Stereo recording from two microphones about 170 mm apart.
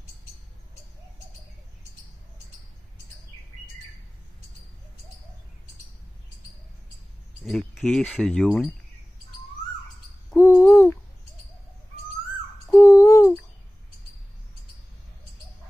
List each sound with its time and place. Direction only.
7.4 s speech: centre (ahead or behind)
10.3 s hoot: 15° left (ahead or behind)
12.6 s a sound: 15° left (ahead or behind)